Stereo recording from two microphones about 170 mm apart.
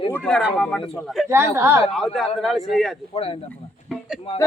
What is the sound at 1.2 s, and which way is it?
Speech, 15° right (ahead or behind).